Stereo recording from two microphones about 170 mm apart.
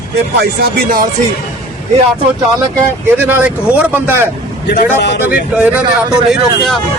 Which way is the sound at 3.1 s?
10° right (ahead or behind).